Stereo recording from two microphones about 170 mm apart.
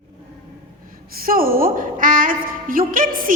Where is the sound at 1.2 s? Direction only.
60° right (ahead or behind).